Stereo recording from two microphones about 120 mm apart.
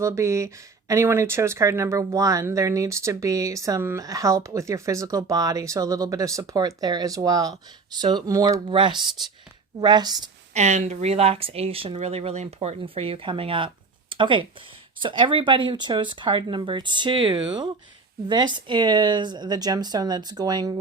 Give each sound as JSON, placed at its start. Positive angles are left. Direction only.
{"t": 0.0, "sound": "speech", "side_deg": -25}
{"t": 8.7, "sound": "speech", "side_deg": -45}
{"t": 10.5, "sound": "speech", "side_deg": -70}